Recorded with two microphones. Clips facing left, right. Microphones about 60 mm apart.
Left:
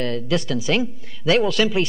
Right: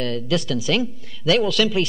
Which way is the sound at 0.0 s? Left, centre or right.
Left.